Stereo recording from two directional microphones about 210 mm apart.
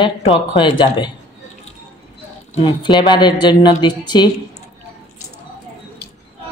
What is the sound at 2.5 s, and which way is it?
A woman's voice, 20° left (ahead or behind).